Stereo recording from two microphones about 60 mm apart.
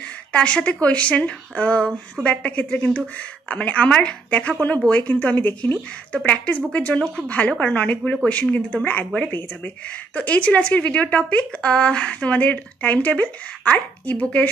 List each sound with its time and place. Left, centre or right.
0.3 s a woman's voice: centre